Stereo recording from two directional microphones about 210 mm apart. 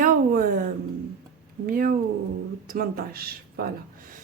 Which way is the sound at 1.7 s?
45° right (ahead or behind).